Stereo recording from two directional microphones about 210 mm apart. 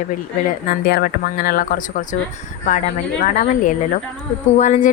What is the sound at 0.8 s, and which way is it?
Speech, 45° left (ahead or behind).